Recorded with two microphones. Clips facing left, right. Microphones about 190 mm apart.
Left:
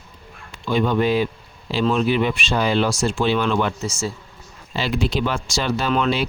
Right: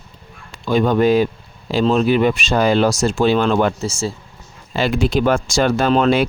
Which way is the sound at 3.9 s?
30° right (ahead or behind).